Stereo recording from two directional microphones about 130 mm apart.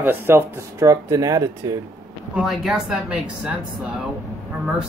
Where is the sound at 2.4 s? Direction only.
Centre (ahead or behind).